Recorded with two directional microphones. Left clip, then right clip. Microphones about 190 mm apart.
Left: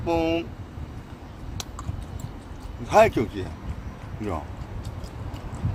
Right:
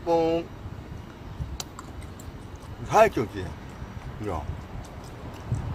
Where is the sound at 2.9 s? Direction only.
5° left (ahead or behind).